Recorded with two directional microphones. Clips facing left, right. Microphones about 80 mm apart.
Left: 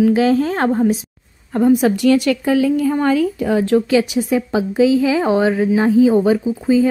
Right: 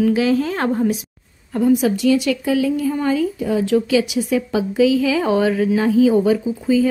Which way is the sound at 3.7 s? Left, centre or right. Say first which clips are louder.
Left 1 dB; left.